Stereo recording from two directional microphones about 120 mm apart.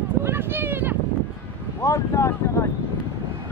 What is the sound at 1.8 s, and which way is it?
Speech, 25° left (ahead or behind).